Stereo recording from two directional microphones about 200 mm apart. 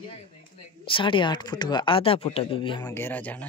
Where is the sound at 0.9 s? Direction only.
25° left (ahead or behind); by 3.3 s 10° left (ahead or behind).